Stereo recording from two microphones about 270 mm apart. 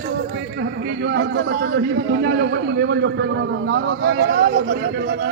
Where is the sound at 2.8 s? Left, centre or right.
Right.